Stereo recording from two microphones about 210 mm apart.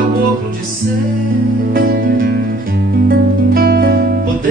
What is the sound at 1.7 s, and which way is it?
Music, 45° right (ahead or behind).